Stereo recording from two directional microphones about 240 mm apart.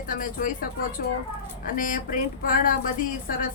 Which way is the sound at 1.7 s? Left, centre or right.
Left.